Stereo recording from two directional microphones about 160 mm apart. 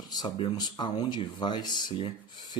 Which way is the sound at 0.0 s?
25° left (ahead or behind).